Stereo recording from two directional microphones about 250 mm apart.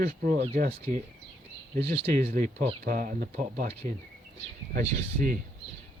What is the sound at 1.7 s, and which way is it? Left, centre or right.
Speech, right.